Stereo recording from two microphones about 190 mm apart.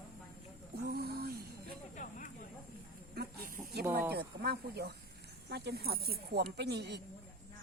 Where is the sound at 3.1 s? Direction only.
55° right (ahead or behind).